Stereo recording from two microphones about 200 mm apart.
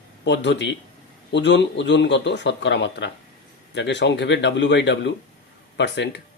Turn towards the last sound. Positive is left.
turn(degrees=60)  # may be behind; listen again after turning